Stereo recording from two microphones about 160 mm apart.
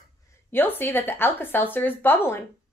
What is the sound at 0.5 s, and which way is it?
A woman's voice, 10° left (ahead or behind).